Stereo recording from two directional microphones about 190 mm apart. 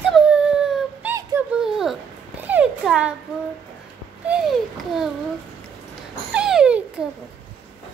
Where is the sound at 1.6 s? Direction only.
Centre (ahead or behind).